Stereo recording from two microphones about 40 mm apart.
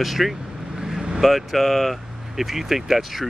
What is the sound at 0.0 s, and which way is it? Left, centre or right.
Speech, centre.